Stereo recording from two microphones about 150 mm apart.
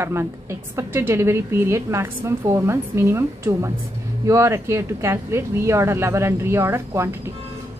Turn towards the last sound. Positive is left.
turn(degrees=-20)  # may be behind; listen again after turning